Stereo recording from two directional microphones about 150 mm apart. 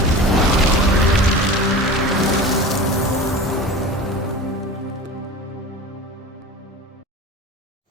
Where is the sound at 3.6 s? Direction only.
Centre (ahead or behind).